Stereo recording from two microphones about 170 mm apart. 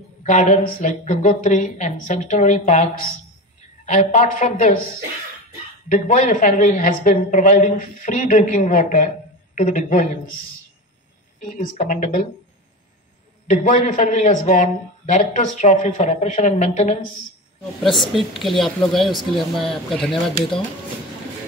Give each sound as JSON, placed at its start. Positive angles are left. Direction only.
{"t": 0.2, "sound": "a man's voice", "side_deg": 45}
{"t": 5.9, "sound": "a man's voice", "side_deg": 45}
{"t": 11.4, "sound": "speech", "side_deg": 40}
{"t": 13.5, "sound": "a man's voice", "side_deg": 50}
{"t": 18.1, "sound": "speech", "side_deg": 0}